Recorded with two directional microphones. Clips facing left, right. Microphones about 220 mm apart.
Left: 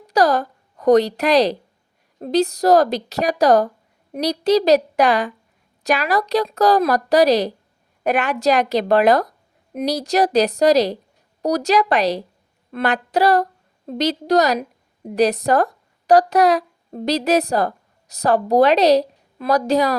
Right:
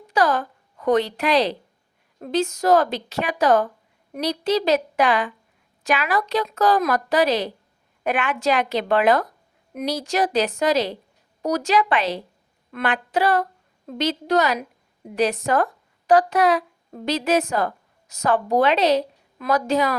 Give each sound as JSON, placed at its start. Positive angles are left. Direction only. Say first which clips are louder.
{"t": 0.1, "sound": "a woman's voice", "louder": "left 4 dB", "side_deg": 40}